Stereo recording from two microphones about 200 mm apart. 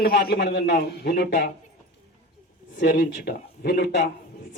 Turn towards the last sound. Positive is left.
turn(degrees=60)  # may be behind; listen again after turning